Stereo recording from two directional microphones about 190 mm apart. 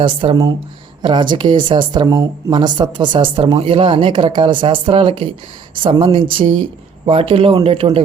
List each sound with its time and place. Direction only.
0.0 s speech: 25° right (ahead or behind)